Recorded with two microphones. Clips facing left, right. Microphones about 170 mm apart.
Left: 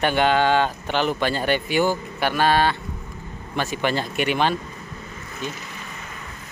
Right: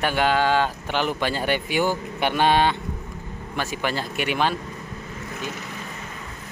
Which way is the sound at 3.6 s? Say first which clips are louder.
Left 3 dB; 5° right (ahead or behind).